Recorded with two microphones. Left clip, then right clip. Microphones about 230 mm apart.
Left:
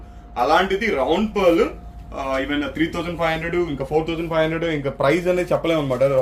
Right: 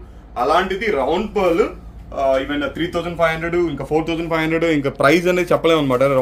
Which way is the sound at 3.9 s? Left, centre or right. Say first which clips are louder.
Right 2 dB; right.